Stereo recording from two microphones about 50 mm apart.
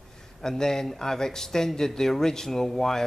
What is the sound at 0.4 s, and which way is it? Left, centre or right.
Speech, centre.